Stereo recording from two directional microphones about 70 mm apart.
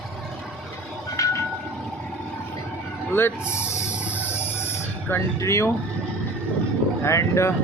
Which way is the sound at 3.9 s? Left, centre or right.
Right.